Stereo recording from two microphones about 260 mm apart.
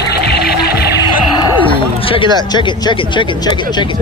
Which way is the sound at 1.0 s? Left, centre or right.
Centre.